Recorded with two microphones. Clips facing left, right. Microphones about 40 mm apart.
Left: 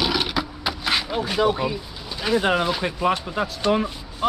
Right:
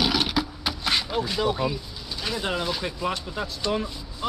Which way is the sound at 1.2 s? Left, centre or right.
Left.